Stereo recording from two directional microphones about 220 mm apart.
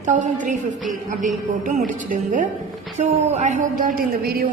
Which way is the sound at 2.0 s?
35° right (ahead or behind).